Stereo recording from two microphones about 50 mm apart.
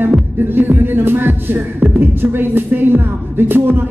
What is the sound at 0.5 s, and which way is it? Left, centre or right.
Music, right.